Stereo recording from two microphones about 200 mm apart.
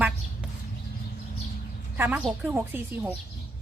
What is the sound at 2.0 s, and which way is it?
A woman's voice, 10° right (ahead or behind).